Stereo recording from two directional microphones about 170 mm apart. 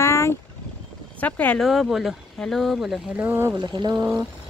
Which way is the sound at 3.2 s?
10° right (ahead or behind).